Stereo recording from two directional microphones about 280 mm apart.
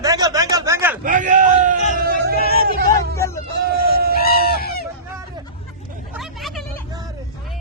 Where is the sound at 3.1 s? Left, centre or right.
Centre.